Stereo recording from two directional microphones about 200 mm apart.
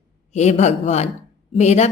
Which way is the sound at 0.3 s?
35° left (ahead or behind).